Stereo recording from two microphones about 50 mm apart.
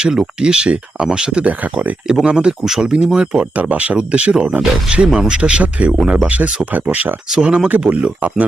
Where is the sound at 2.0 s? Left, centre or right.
Centre.